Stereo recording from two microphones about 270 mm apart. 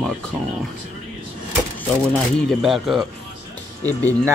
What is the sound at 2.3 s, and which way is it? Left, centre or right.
A man's voice, centre.